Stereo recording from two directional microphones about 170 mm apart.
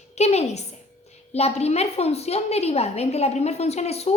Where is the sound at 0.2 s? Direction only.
40° left (ahead or behind).